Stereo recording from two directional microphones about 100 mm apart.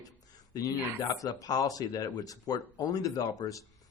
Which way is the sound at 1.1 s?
35° left (ahead or behind).